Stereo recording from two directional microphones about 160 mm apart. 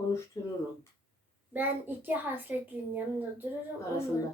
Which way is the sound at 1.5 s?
10° right (ahead or behind).